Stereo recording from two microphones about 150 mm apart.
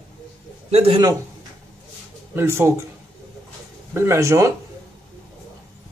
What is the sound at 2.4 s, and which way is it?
Speech, 15° right (ahead or behind).